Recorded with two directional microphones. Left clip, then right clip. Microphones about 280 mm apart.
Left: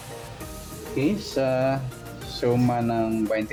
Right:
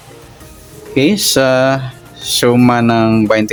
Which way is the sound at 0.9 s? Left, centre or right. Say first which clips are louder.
Right 13 dB; right.